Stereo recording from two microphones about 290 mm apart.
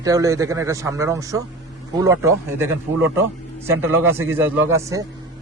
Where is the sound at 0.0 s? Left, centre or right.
Centre.